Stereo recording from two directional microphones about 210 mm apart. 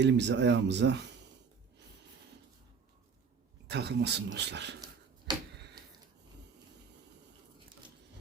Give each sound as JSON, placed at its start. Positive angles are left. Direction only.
{"t": 0.0, "sound": "speech", "side_deg": -55}
{"t": 3.7, "sound": "speech", "side_deg": -50}
{"t": 5.3, "sound": "a sound", "side_deg": -20}